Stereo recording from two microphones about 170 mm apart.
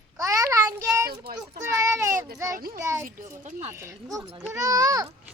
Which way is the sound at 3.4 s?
40° right (ahead or behind).